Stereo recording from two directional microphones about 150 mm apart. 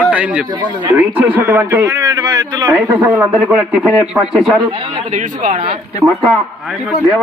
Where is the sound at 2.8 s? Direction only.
15° right (ahead or behind).